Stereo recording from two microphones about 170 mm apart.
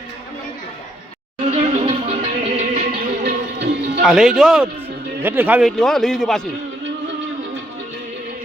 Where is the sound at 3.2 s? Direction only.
90° right.